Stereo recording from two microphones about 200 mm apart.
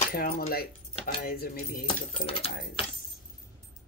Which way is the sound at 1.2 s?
50° left (ahead or behind).